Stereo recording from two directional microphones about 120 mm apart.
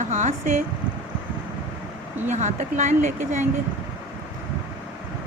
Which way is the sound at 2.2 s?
75° right (ahead or behind).